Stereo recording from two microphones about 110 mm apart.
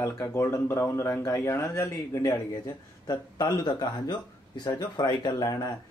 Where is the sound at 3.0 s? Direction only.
35° left (ahead or behind).